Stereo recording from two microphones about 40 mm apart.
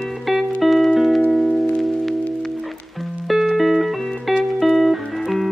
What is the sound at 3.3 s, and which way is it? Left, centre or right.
Music, centre.